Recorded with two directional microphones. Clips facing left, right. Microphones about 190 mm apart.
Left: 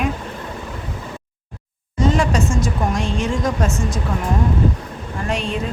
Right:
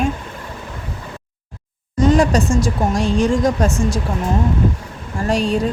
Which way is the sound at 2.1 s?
35° right (ahead or behind).